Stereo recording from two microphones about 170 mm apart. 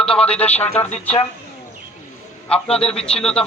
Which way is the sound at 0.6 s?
40° left (ahead or behind).